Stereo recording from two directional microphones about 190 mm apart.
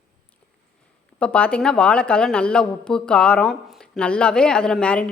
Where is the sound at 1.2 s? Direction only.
5° left (ahead or behind).